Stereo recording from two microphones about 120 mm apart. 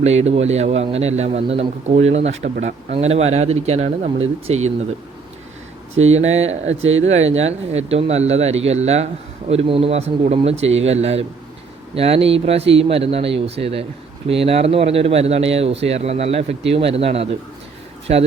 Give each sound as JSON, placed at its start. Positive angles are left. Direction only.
{"t": 0.0, "sound": "a man's voice", "side_deg": -65}
{"t": 6.1, "sound": "a man's voice", "side_deg": -65}
{"t": 9.5, "sound": "a man's voice", "side_deg": -50}